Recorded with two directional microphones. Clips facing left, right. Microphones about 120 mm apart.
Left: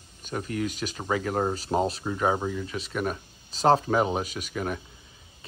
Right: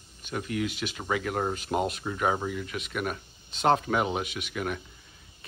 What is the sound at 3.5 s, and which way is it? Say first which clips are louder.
Speech: left 3 dB; 35° left (ahead or behind).